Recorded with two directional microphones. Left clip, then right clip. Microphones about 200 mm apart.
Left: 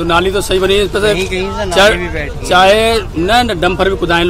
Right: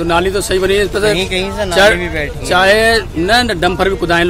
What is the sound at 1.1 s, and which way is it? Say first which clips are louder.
Speech: even; 55° right (ahead or behind).